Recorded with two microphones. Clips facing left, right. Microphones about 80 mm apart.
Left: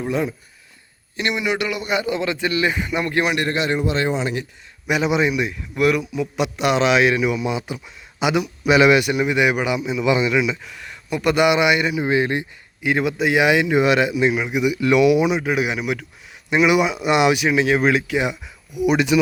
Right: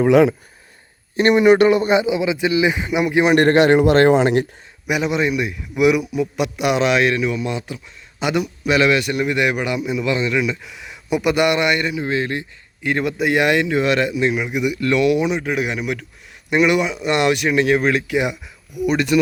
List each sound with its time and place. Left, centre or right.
0.0 s speech: right
1.1 s speech: right
2.0 s speech: centre
3.3 s a man's voice: right
4.9 s speech: centre
8.6 s speech: centre
10.6 s speech: centre
11.9 s speech: centre
12.8 s speech: centre